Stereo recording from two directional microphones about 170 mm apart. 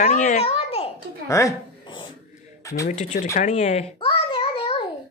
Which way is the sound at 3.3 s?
40° left (ahead or behind).